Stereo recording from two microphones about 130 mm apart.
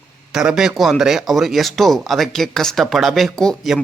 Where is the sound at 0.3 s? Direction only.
5° right (ahead or behind).